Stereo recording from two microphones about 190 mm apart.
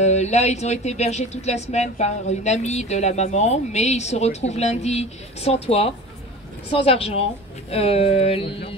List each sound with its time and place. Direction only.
0.0 s speech: 35° left (ahead or behind)